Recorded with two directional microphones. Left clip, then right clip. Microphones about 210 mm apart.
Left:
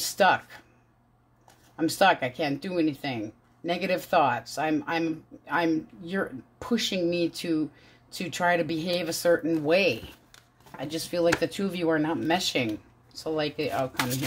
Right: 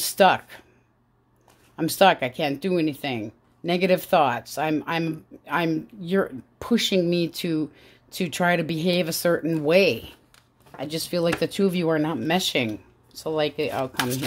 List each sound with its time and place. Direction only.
0.0 s speech: 50° right (ahead or behind)
1.8 s speech: 50° right (ahead or behind)